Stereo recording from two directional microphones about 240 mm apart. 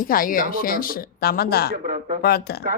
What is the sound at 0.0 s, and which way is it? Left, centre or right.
Speech, left.